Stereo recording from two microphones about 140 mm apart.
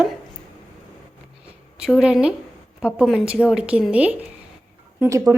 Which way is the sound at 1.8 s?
5° right (ahead or behind).